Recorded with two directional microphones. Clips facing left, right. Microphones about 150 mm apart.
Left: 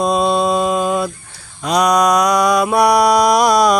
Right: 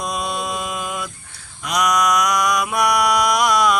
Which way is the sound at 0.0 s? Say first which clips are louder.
Left 10 dB; 30° left (ahead or behind).